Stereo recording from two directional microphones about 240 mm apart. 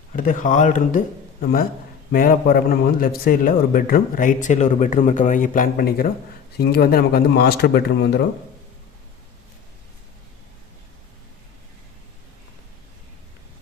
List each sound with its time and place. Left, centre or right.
0.2 s a man's voice: left